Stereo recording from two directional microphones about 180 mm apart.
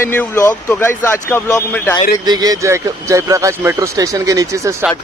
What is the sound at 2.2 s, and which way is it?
Speech, 20° right (ahead or behind).